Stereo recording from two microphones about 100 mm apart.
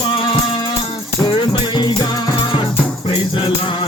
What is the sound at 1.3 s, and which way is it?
Music, 50° left (ahead or behind).